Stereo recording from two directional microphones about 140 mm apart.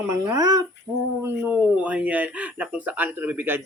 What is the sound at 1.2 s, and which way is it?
Speech, 15° right (ahead or behind).